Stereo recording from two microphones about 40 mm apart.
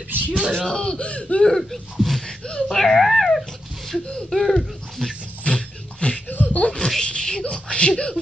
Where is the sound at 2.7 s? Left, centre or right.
Centre.